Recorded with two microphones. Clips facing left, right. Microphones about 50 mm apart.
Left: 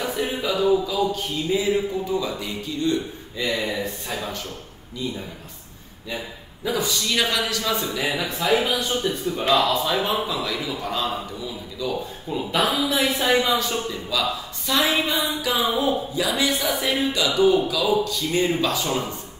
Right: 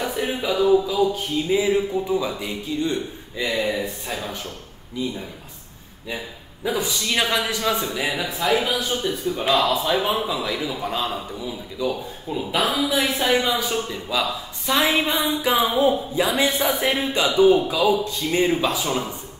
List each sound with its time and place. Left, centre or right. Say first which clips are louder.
0.0 s a sound: right 1 dB; centre
1.1 s speech: right 2 dB; centre
3.6 s a man's voice: right 2 dB; centre
5.0 s speech: right 2 dB; centre
6.6 s a man's voice: even; centre
7.8 s a man's voice: even; centre
10.2 s a man's voice: right 1 dB; centre
11.9 s a man's voice: even; centre
13.6 s speech: right 1 dB; centre
15.0 s a man's voice: right 2 dB; right
16.3 s music: right 2 dB; right
17.0 s a man's voice: right 2 dB; right
18.4 s speech: right 2 dB; centre
18.9 s a man's voice: even; centre